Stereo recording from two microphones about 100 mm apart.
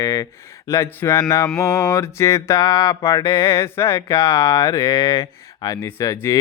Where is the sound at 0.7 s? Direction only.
30° left (ahead or behind).